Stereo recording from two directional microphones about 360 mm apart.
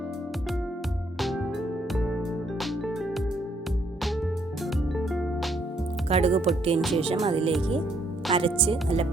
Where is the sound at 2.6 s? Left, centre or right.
Centre.